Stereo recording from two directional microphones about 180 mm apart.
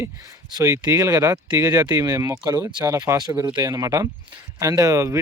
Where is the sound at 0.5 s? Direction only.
20° right (ahead or behind).